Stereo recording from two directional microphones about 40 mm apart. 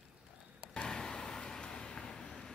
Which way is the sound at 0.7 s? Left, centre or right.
Centre.